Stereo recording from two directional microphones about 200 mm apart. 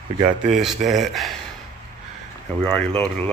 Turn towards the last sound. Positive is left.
turn(degrees=5)  # may be behind; listen again after turning